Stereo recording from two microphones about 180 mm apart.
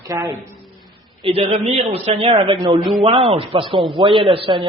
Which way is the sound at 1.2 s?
35° right (ahead or behind).